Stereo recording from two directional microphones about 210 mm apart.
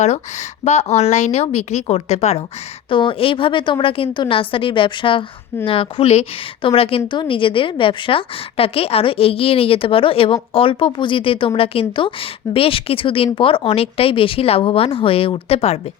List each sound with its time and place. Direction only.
0.0 s a woman's voice: 35° left (ahead or behind)